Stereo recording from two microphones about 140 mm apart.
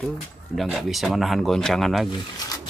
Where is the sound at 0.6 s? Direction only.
Centre (ahead or behind).